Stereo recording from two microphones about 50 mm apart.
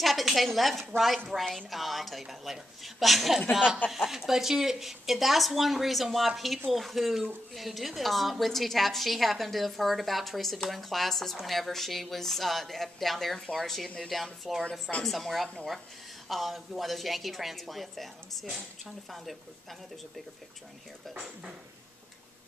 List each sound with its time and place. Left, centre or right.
0.0 s a woman's voice: centre
3.5 s chuckle: centre
3.9 s a woman's voice: centre
14.6 s a woman's voice: left
15.0 s a woman's voice: centre